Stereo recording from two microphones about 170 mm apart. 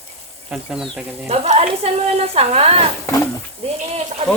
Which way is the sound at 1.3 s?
40° right (ahead or behind).